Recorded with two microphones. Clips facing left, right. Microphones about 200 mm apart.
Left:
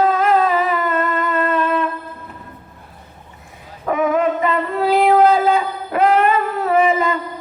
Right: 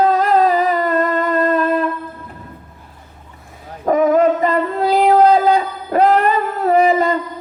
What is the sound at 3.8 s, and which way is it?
Female singing, 35° right (ahead or behind).